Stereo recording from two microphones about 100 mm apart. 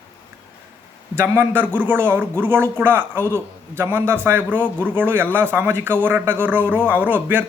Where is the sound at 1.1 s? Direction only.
20° right (ahead or behind).